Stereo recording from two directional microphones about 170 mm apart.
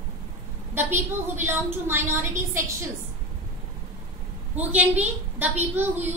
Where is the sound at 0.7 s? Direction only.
15° right (ahead or behind).